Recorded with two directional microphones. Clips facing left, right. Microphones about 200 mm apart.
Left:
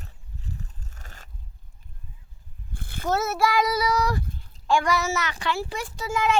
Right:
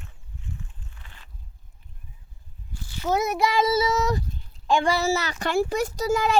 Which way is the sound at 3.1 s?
15° right (ahead or behind).